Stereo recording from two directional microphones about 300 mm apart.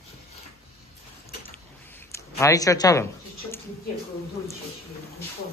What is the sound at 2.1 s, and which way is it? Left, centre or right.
Speech, centre.